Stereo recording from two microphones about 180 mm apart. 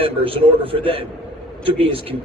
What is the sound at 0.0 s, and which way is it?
A man's voice, 30° right (ahead or behind).